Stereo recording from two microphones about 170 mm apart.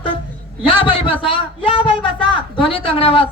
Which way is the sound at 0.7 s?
30° left (ahead or behind).